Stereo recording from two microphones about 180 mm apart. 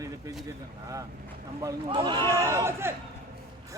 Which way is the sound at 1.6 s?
25° right (ahead or behind).